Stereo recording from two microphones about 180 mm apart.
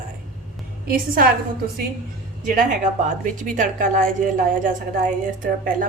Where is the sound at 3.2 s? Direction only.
45° right (ahead or behind).